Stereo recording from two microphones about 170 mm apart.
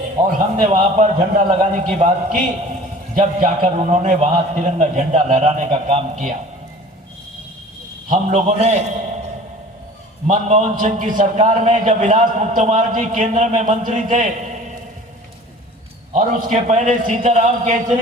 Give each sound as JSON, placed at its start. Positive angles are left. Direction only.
{"t": 0.2, "sound": "a man's voice", "side_deg": -25}
{"t": 0.6, "sound": "a man's voice", "side_deg": -45}
{"t": 8.1, "sound": "a man's voice", "side_deg": -45}
{"t": 10.2, "sound": "a man's voice", "side_deg": -45}
{"t": 16.1, "sound": "a man's voice", "side_deg": -45}